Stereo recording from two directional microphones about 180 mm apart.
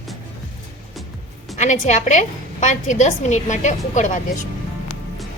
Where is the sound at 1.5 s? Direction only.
40° left (ahead or behind).